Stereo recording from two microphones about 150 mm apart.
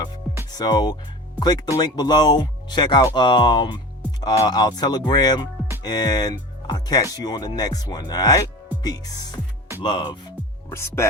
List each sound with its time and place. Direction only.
0.5 s speech: 30° left (ahead or behind)
10.7 s speech: 15° left (ahead or behind)